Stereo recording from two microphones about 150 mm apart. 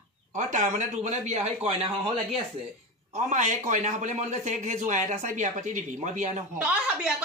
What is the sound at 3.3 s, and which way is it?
Speech, 55° right (ahead or behind).